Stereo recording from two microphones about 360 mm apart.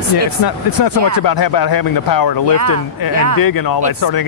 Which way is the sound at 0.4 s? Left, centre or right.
Left.